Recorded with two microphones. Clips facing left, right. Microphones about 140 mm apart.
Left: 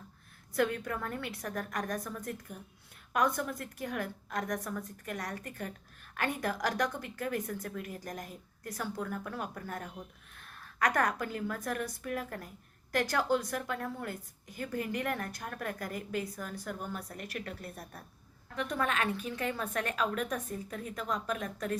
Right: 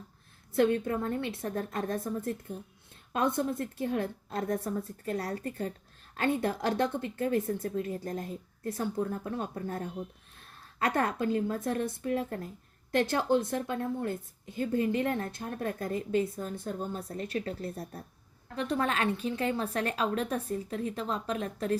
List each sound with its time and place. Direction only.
0.5 s a woman's voice: 25° right (ahead or behind)